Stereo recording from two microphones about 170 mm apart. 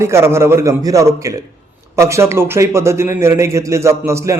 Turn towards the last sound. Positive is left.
turn(degrees=-15)  # may be behind; listen again after turning